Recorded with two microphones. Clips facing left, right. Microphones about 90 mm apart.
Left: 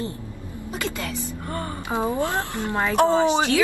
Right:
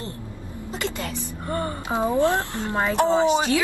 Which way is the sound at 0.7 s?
20° right (ahead or behind).